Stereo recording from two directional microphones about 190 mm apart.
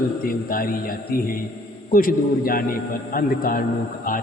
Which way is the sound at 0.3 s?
50° left (ahead or behind).